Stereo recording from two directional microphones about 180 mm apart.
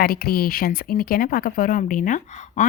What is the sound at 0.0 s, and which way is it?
Speech, 55° left (ahead or behind).